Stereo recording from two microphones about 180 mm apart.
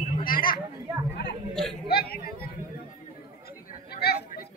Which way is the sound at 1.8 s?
60° left (ahead or behind).